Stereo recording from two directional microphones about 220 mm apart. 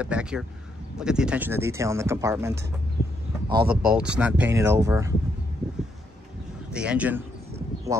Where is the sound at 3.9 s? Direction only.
5° right (ahead or behind).